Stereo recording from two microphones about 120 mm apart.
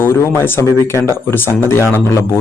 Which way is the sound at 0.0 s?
20° left (ahead or behind).